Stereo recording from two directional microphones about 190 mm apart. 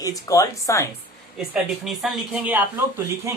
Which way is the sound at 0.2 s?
15° left (ahead or behind).